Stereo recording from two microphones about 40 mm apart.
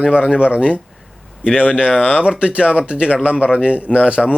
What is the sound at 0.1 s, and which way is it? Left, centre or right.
Speech, right.